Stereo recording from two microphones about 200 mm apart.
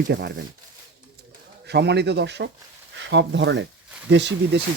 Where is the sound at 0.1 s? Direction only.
60° right (ahead or behind).